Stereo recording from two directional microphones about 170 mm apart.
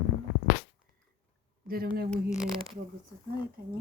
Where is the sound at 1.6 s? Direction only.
65° right (ahead or behind).